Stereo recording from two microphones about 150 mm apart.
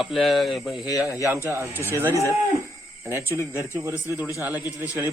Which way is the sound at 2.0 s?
15° right (ahead or behind).